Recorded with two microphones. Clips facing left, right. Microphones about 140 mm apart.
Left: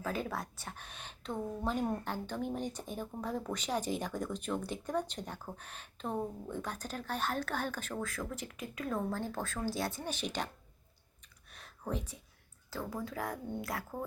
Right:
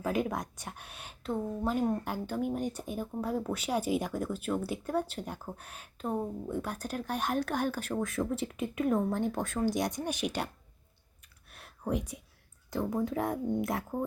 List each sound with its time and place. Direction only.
0.0 s speech: 15° right (ahead or behind)
11.5 s a sound: 10° right (ahead or behind)
12.7 s speech: 25° right (ahead or behind)